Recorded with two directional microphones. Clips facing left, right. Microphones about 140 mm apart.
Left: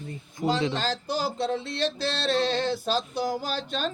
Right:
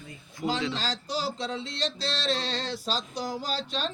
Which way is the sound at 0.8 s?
55° left (ahead or behind).